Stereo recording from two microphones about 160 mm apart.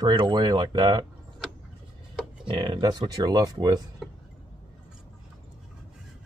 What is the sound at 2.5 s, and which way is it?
Speech, 30° right (ahead or behind).